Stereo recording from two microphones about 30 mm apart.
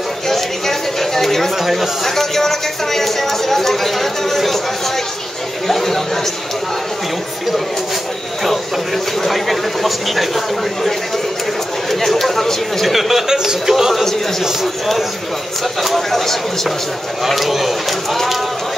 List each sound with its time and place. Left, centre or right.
0.3 s a sound: centre
1.6 s speech: centre
2.1 s speech: centre
5.7 s chatter: centre
9.2 s speech: centre
12.8 s speech: centre
13.3 s speech: centre
15.8 s speech: centre